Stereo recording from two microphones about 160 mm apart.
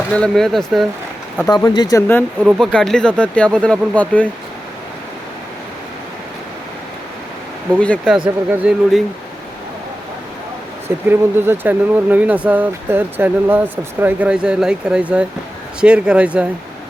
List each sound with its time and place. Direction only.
0.1 s speech: 5° left (ahead or behind)
1.5 s speech: 25° left (ahead or behind)
2.4 s speech: 5° right (ahead or behind)
2.7 s speech: 5° left (ahead or behind)
7.8 s speech: 10° left (ahead or behind)
8.4 s speech: 5° right (ahead or behind)
10.8 s speech: 15° right (ahead or behind)